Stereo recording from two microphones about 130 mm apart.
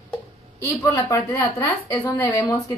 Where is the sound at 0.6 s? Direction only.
25° left (ahead or behind).